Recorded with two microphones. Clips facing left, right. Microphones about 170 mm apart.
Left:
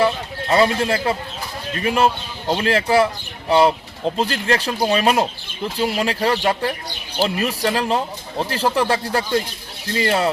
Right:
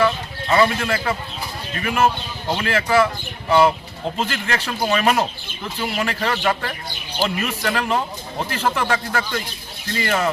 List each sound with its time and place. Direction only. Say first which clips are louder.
0.5 s speech: left 1 dB; 30° left (ahead or behind)